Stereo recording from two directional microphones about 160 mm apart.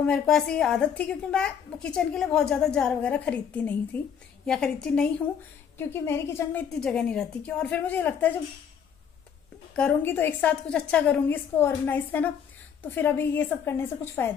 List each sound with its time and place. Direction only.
0.0 s a woman's voice: 5° left (ahead or behind)
5.8 s a woman's voice: 15° left (ahead or behind)
9.8 s a woman's voice: 10° left (ahead or behind)